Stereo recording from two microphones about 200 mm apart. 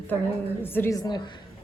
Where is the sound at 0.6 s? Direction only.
10° left (ahead or behind).